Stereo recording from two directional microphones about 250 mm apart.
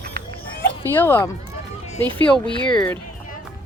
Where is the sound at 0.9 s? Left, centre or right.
Centre.